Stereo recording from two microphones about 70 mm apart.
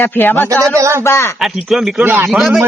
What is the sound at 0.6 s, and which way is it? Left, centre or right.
Speech, right.